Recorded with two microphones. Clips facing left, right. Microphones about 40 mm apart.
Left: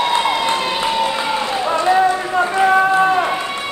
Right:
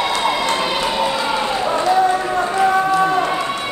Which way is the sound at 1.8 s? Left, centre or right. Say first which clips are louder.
Left 1 dB; left.